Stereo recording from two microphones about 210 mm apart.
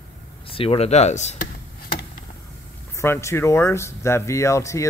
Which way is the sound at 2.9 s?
15° left (ahead or behind).